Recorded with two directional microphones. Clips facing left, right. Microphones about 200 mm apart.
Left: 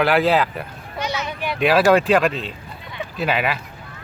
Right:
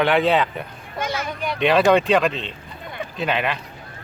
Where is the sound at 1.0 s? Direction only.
50° right (ahead or behind).